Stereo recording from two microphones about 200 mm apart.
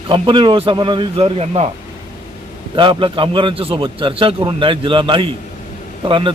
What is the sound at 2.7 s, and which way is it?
A man's voice, 25° right (ahead or behind).